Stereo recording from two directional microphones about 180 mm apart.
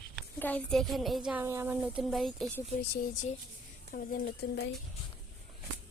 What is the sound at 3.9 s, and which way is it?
Speech, 50° left (ahead or behind).